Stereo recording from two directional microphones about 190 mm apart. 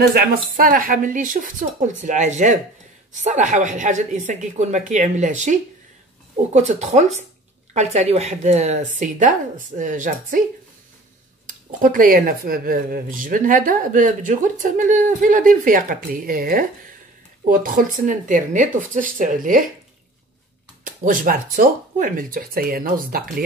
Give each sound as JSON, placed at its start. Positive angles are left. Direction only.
{"t": 0.0, "sound": "speech", "side_deg": -55}
{"t": 11.4, "sound": "speech", "side_deg": -45}
{"t": 20.8, "sound": "speech", "side_deg": -45}